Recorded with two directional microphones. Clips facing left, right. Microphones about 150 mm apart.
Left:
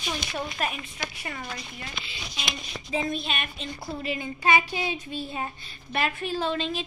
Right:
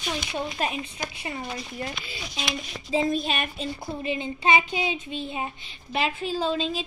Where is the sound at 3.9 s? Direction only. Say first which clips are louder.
Right 1 dB; 20° right (ahead or behind).